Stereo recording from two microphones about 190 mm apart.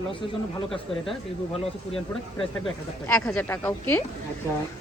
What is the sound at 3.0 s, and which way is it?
Speech, 10° left (ahead or behind).